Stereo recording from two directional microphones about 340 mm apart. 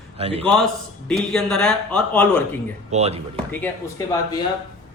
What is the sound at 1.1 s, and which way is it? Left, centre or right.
Speech, centre.